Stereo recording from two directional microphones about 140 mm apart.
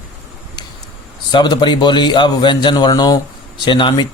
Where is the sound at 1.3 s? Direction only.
30° left (ahead or behind).